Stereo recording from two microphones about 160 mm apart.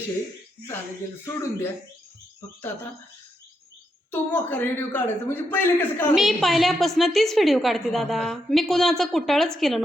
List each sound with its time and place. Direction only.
1.2 s a man's voice: 20° left (ahead or behind)
4.1 s a man's voice: 10° left (ahead or behind)
6.1 s a woman's voice: centre (ahead or behind)